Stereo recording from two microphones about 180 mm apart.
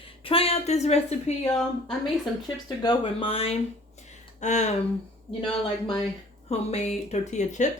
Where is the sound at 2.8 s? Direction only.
30° left (ahead or behind).